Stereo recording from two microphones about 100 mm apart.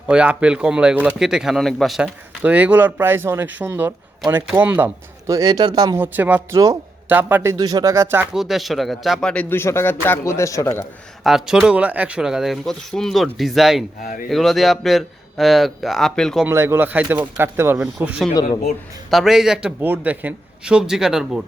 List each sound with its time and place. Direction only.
0.1 s speech: 10° right (ahead or behind)
2.0 s speech: 15° right (ahead or behind)
5.2 s speech: 35° right (ahead or behind)
6.0 s speech: 15° right (ahead or behind)
6.5 s speech: 35° right (ahead or behind)
7.1 s speech: 20° right (ahead or behind)
7.5 s speech: 40° right (ahead or behind); by 8.3 s 20° right (ahead or behind)
8.3 s speech: 5° right (ahead or behind)
9.3 s a man's voice: 15° left (ahead or behind)
9.6 s speech: 25° left (ahead or behind)
11.2 s speech: 5° right (ahead or behind)
16.5 s speech: 25° right (ahead or behind)
19.1 s speech: 5° right (ahead or behind)
19.8 s speech: 15° right (ahead or behind)